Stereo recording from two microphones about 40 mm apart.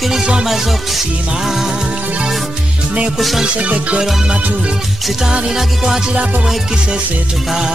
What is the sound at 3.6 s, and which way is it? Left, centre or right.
Music, right.